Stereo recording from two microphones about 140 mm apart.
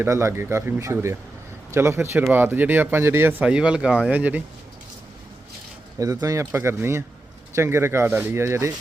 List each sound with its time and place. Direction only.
0.0 s speech: 20° right (ahead or behind)
6.0 s speech: 25° right (ahead or behind)